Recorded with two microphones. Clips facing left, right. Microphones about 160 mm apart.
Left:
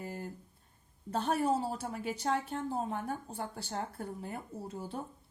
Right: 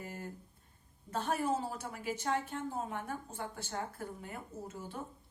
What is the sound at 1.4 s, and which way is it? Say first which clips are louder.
A woman's voice: left 3 dB; 35° left (ahead or behind).